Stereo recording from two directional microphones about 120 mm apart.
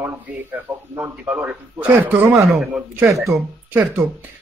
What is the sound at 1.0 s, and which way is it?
Speech, 15° right (ahead or behind).